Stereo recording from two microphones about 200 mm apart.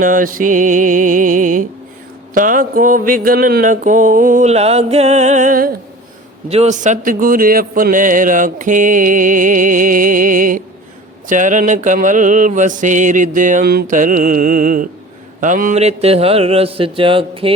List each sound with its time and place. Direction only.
0.0 s mantra: 45° right (ahead or behind)
6.5 s a sound: 35° right (ahead or behind)
11.3 s mantra: 40° right (ahead or behind)
15.4 s a man's voice: 40° right (ahead or behind)